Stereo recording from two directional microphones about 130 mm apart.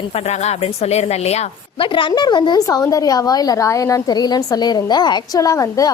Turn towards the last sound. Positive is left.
turn(degrees=25)  # may be behind; listen again after turning